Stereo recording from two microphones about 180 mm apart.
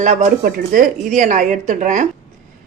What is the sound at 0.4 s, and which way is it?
Speech, 55° right (ahead or behind).